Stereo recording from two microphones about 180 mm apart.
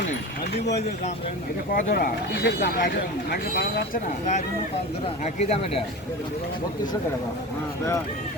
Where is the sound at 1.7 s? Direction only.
55° left (ahead or behind); by 5.8 s 35° left (ahead or behind).